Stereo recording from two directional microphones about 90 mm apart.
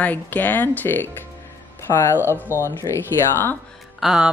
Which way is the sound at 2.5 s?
30° left (ahead or behind).